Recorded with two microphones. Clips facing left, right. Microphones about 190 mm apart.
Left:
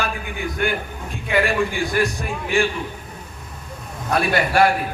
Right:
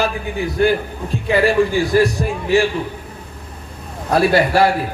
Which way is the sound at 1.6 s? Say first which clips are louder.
Right 6 dB; 40° right (ahead or behind).